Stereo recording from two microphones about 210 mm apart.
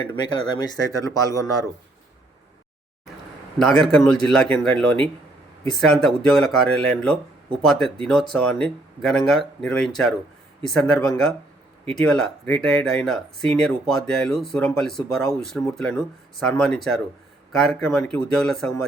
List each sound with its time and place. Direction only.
0.2 s speech: 20° left (ahead or behind)
3.6 s speech: centre (ahead or behind)